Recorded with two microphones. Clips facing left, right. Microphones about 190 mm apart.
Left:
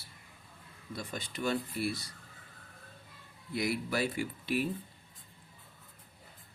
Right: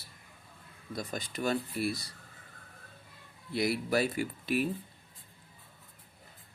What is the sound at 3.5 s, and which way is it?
Speech, 35° right (ahead or behind).